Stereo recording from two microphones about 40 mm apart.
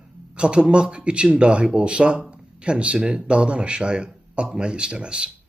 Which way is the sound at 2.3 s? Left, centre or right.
Right.